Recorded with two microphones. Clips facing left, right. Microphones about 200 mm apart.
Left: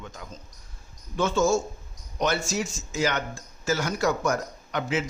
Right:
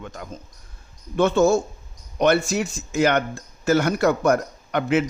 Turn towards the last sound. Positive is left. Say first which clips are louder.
# right 7 dB
turn(degrees=-60)  # may be behind; listen again after turning